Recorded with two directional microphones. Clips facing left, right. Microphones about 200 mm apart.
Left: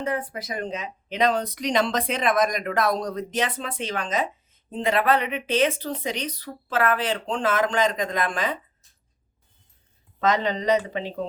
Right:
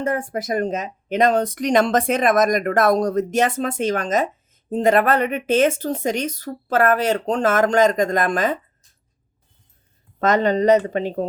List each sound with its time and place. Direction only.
0.0 s speech: 45° right (ahead or behind)
10.2 s speech: 50° right (ahead or behind)